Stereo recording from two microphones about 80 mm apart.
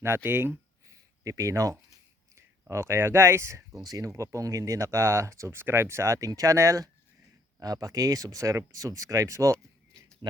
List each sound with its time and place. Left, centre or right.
0.0 s speech: right
0.9 s a sound: right
2.3 s speech: right
3.8 s speech: right